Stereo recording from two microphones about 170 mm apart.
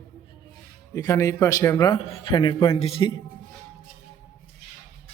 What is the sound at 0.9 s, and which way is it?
A man's voice, 20° left (ahead or behind).